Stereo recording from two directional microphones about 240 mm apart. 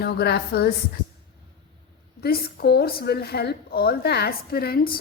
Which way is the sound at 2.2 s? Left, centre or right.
Left.